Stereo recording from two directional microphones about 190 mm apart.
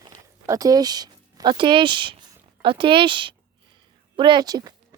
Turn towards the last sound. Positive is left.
turn(degrees=-20)  # may be behind; listen again after turning